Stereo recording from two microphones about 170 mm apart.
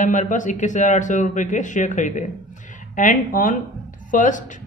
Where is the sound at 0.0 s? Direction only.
50° left (ahead or behind).